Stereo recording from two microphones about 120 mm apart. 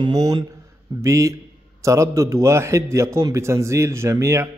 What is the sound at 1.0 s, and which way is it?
A man's voice, 25° right (ahead or behind).